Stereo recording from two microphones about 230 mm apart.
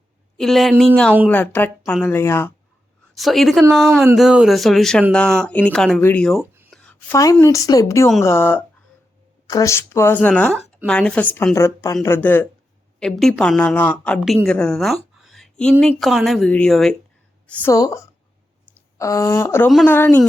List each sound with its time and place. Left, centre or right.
0.3 s speech: centre
3.2 s speech: centre
7.1 s a woman's voice: centre